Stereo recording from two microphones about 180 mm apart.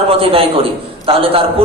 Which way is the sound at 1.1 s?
30° right (ahead or behind).